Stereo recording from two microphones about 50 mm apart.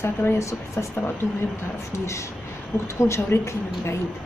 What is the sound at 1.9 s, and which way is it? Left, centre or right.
A man's voice, left.